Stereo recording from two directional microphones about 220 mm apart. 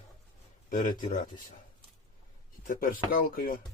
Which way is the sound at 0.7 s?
35° left (ahead or behind).